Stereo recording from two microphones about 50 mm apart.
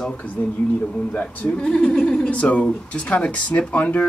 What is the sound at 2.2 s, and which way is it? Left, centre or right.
Speech, left.